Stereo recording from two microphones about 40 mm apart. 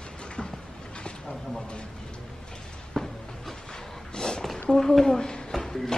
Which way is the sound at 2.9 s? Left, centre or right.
Centre.